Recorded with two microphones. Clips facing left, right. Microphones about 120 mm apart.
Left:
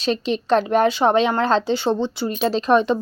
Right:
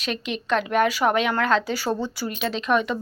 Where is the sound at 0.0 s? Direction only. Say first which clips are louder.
Left 7 dB; 30° left (ahead or behind).